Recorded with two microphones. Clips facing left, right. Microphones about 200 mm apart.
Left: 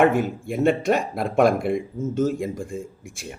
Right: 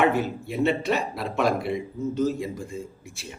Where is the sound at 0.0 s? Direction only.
50° left (ahead or behind).